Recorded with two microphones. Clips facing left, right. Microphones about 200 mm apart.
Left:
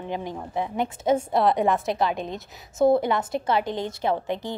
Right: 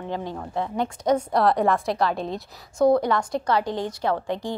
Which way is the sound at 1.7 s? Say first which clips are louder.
Right 1 dB; 20° left (ahead or behind).